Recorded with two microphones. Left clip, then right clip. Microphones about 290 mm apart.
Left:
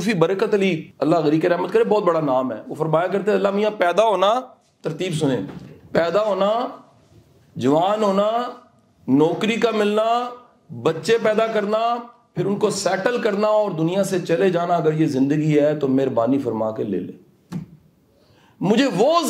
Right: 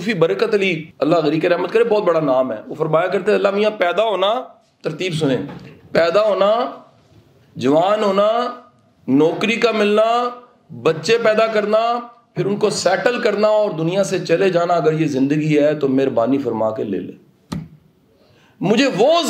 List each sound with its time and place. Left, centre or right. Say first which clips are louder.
0.0 s a man's voice: right 2 dB; left
18.6 s a man's voice: right 3 dB; left